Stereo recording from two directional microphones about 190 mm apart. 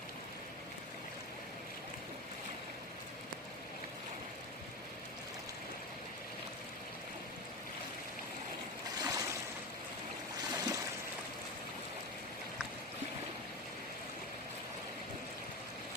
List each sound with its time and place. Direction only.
9.0 s stream: 20° right (ahead or behind)
10.5 s boat: 20° right (ahead or behind)